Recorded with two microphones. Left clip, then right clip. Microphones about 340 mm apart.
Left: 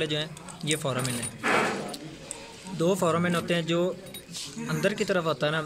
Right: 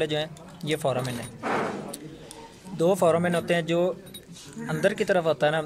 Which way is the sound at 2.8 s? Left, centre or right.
Right.